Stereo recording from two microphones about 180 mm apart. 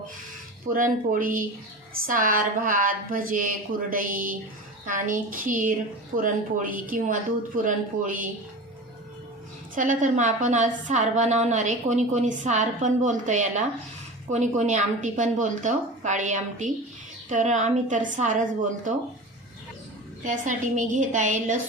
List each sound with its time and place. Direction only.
0.7 s a woman's voice: 50° right (ahead or behind)
9.7 s a woman's voice: 45° right (ahead or behind)
20.2 s a woman's voice: 45° right (ahead or behind)